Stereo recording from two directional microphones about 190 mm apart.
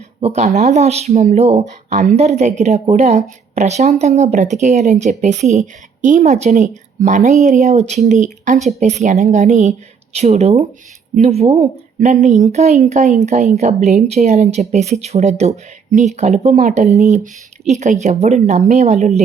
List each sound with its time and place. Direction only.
0.2 s speech: 35° right (ahead or behind)